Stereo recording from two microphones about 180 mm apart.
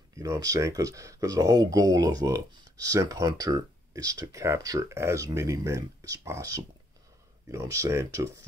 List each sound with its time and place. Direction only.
0.2 s speech: 20° right (ahead or behind)